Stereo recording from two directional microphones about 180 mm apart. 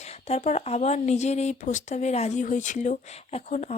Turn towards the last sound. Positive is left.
turn(degrees=40)  # may be behind; listen again after turning